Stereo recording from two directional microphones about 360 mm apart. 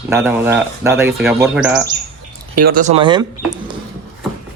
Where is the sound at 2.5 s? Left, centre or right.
Right.